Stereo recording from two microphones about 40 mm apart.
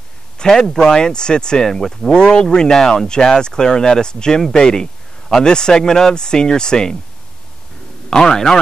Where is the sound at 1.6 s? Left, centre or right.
Centre.